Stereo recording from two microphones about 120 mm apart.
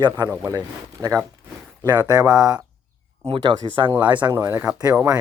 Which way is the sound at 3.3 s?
45° right (ahead or behind).